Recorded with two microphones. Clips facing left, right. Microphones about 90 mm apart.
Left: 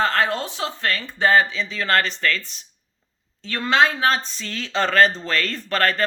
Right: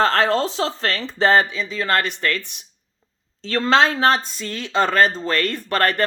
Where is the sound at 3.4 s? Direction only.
30° right (ahead or behind).